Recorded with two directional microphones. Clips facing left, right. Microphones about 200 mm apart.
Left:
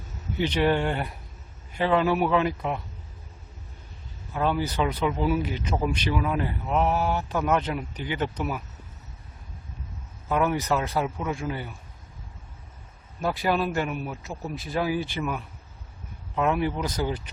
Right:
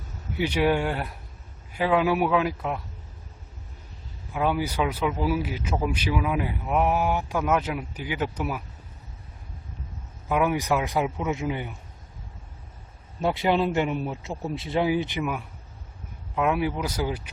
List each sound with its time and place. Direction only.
0.3 s speech: 10° right (ahead or behind)
4.4 s speech: 10° right (ahead or behind)
10.2 s speech: 10° right (ahead or behind)
13.2 s speech: 25° right (ahead or behind)
15.2 s speech: 10° right (ahead or behind)